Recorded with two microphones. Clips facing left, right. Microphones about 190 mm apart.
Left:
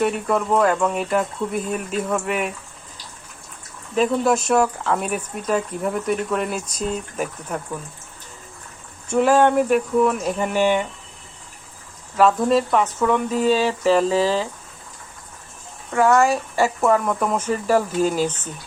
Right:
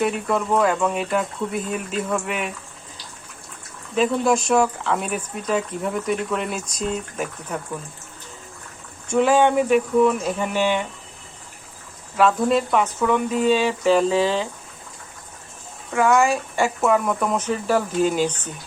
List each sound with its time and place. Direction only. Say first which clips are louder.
0.0 s speech: left 1 dB; centre (ahead or behind)
3.9 s speech: left 1 dB; 5° left (ahead or behind)
9.0 s speech: left 1 dB; 5° left (ahead or behind)
10.5 s speech: left 3 dB; 45° left (ahead or behind)
12.1 s speech: left 2 dB; centre (ahead or behind)
16.2 s speech: left 2 dB; 5° left (ahead or behind)